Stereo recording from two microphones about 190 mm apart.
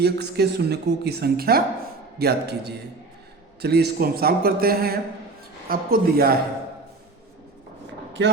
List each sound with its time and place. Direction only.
0.0 s a man's voice: 60° right (ahead or behind)